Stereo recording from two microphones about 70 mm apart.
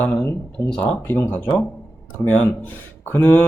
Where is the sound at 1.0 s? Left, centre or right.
Left.